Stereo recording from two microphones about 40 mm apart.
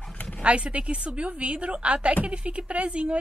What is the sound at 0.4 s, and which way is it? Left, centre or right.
Speech, right.